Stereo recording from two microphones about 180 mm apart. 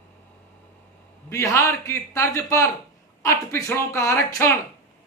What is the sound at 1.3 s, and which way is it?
A man's voice, 15° left (ahead or behind).